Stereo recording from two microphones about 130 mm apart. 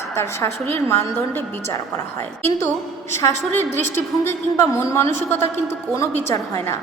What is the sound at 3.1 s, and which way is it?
A woman's voice, 20° left (ahead or behind).